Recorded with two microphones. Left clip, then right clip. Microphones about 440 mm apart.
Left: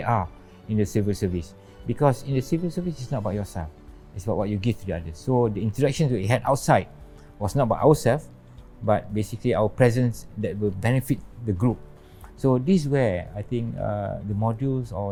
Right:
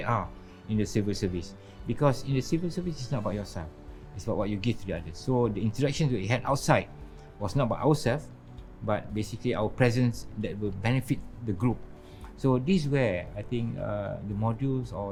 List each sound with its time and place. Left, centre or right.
0.0 s speech: left
7.4 s speech: left